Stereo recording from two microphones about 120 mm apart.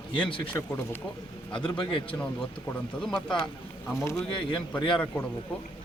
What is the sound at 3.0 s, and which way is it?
Speech, 5° left (ahead or behind).